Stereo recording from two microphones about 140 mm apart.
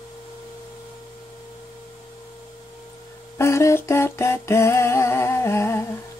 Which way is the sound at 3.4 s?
20° left (ahead or behind).